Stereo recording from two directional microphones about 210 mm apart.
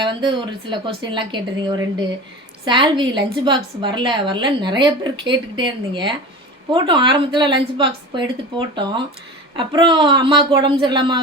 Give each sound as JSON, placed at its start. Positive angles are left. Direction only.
{"t": 0.0, "sound": "a woman's voice", "side_deg": -20}